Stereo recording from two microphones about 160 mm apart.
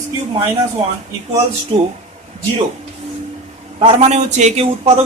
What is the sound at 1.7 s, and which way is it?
Speech, 35° right (ahead or behind).